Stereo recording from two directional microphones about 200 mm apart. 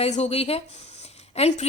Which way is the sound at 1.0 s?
30° left (ahead or behind).